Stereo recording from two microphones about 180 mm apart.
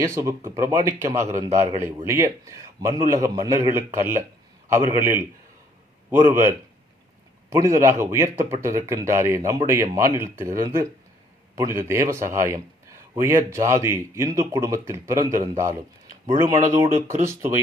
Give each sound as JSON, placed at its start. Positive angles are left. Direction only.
{"t": 0.0, "sound": "a man's voice", "side_deg": -15}
{"t": 7.5, "sound": "a man's voice", "side_deg": -15}
{"t": 16.7, "sound": "a man's voice", "side_deg": -15}